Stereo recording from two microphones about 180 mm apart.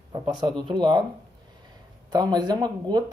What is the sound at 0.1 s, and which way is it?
Speech, 25° right (ahead or behind).